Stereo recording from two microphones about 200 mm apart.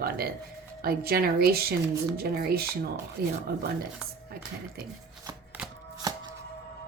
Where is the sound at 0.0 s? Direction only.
50° right (ahead or behind).